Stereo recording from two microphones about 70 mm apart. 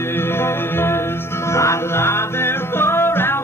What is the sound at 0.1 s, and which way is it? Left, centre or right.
Music, left.